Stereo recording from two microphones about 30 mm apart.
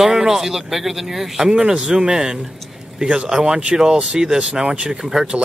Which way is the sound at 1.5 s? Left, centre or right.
Right.